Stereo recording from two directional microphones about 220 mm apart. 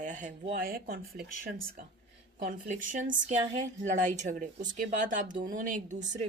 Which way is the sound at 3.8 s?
35° right (ahead or behind).